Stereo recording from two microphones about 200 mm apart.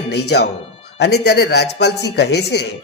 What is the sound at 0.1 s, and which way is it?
A man's voice, 55° left (ahead or behind).